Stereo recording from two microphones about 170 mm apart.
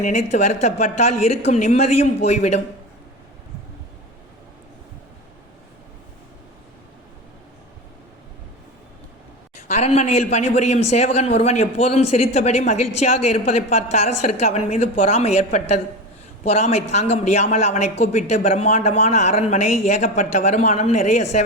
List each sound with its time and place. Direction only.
0.0 s a man's voice: 45° left (ahead or behind)
9.6 s a man's voice: 40° left (ahead or behind)